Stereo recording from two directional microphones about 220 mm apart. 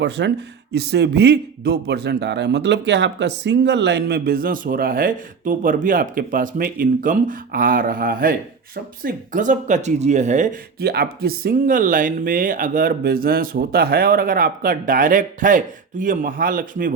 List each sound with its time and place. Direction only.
0.0 s a man's voice: 50° right (ahead or behind)